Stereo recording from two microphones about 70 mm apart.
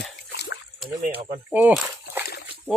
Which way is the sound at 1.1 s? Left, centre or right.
Right.